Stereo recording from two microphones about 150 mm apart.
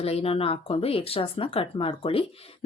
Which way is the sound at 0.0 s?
40° left (ahead or behind).